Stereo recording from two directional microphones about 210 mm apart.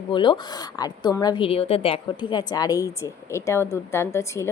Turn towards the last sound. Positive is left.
turn(degrees=15)  # may be behind; listen again after turning